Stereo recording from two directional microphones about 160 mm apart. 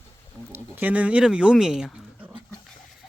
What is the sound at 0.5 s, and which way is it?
Speech, 10° right (ahead or behind).